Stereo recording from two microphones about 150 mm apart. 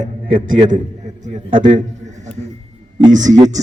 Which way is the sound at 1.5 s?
55° right (ahead or behind).